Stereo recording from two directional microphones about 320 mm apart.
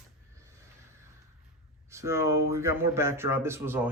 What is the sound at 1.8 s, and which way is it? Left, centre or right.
Speech, centre.